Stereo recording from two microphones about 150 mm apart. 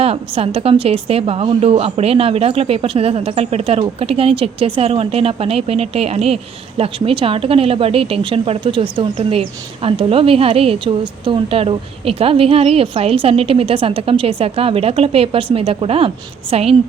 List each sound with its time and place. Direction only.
0.0 s a woman's voice: 40° right (ahead or behind)